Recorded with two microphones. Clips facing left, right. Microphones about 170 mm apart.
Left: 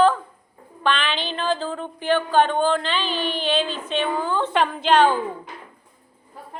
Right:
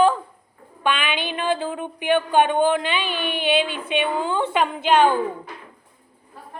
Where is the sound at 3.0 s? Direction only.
55° right (ahead or behind).